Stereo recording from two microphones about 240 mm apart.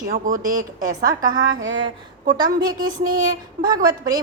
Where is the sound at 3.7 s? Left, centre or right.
Centre.